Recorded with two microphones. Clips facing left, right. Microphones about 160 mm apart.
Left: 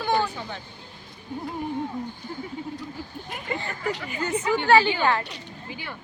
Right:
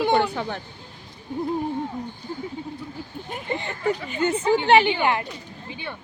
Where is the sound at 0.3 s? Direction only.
65° right (ahead or behind).